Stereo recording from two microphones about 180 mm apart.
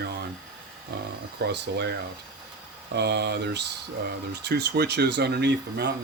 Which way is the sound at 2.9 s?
70° right (ahead or behind).